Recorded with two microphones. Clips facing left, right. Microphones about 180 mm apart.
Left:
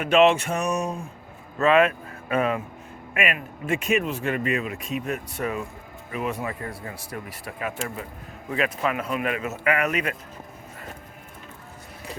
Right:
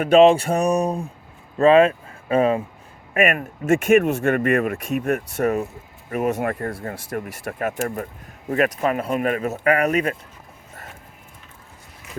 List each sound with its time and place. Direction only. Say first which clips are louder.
0.0 s speech: right 5 dB; 35° right (ahead or behind)
3.2 s speech: right 7 dB; 45° right (ahead or behind)